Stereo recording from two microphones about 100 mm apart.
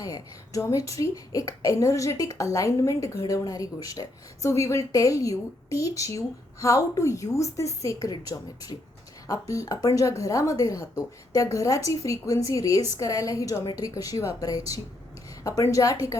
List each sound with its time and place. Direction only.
0.0 s speech: 35° left (ahead or behind)